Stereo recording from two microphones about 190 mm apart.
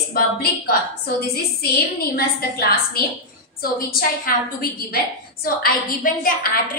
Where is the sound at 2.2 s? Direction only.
55° left (ahead or behind).